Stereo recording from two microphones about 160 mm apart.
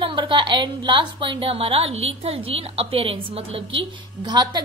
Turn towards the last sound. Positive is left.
turn(degrees=-25)  # may be behind; listen again after turning